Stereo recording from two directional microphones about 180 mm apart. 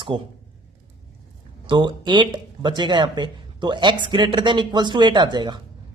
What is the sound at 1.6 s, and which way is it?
A man's voice, 25° right (ahead or behind).